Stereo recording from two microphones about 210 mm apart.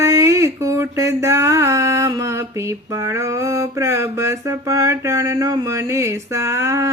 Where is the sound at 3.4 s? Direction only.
15° right (ahead or behind).